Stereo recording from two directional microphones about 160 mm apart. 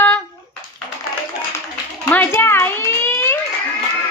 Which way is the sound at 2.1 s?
10° left (ahead or behind).